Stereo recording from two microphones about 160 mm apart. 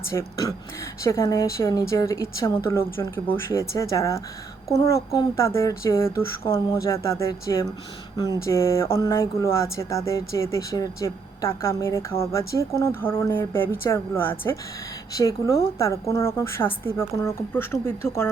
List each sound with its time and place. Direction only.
0.1 s a woman's voice: 20° left (ahead or behind)